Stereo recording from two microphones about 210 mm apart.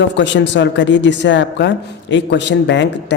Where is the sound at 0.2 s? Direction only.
60° left (ahead or behind).